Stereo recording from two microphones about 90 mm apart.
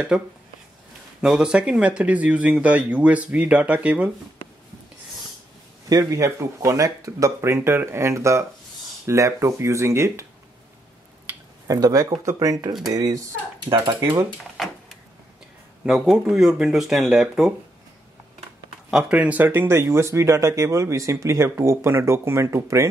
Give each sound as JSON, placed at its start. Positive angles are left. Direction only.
{"t": 0.1, "sound": "speech", "side_deg": -10}
{"t": 5.9, "sound": "speech", "side_deg": -40}
{"t": 11.6, "sound": "speech", "side_deg": -40}
{"t": 14.6, "sound": "a sound", "side_deg": 0}
{"t": 15.8, "sound": "speech", "side_deg": -5}
{"t": 18.9, "sound": "speech", "side_deg": -10}